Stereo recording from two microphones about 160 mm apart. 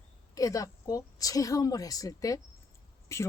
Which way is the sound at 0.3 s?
20° left (ahead or behind).